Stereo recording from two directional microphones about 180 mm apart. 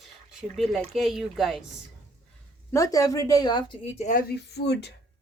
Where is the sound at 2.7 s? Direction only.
20° left (ahead or behind).